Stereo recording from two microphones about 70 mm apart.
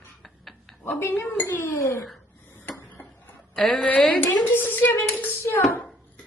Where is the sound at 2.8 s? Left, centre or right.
Left.